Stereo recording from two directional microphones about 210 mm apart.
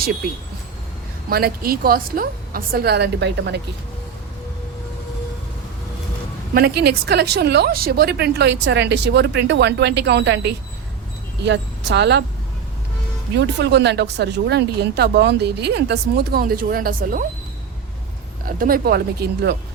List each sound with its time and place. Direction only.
1.3 s speech: 45° right (ahead or behind)
6.5 s speech: 45° right (ahead or behind)
11.4 s speech: 55° right (ahead or behind)
13.3 s speech: 55° right (ahead or behind)
18.4 s speech: 45° right (ahead or behind)